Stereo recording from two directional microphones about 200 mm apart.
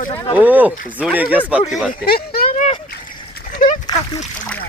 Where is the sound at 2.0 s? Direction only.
50° left (ahead or behind).